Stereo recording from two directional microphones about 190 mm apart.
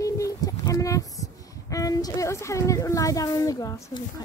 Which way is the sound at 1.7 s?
20° left (ahead or behind).